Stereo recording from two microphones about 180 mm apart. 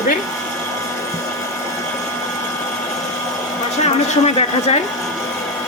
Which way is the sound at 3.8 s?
40° left (ahead or behind).